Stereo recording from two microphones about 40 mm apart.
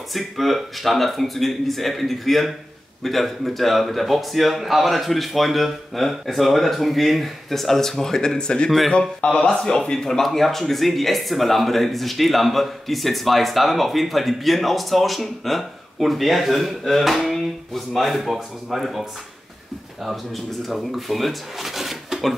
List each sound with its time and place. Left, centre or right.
0.1 s speech: centre; by 8.6 s left
8.6 s speech: centre
8.9 s speech: left; by 19.0 s centre
20.6 s speech: centre